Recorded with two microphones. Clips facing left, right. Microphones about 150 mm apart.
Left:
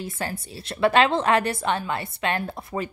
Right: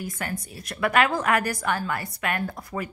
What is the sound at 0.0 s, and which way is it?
A woman's voice, 30° left (ahead or behind).